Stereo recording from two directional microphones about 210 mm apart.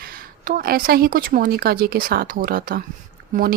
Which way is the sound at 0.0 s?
40° right (ahead or behind).